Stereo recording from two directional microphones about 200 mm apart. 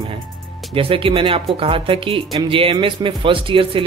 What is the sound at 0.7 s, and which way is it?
Speech, 25° right (ahead or behind).